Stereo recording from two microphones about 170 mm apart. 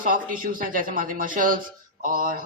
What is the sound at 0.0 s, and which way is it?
Speech, 55° right (ahead or behind).